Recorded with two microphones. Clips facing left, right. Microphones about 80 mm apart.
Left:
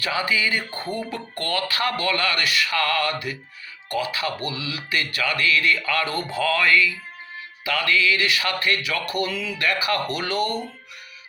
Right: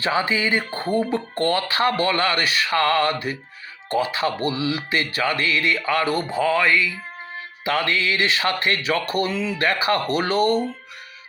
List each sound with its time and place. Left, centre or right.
0.0 s speech: right